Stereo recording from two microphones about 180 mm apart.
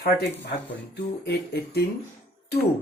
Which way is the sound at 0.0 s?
65° left (ahead or behind).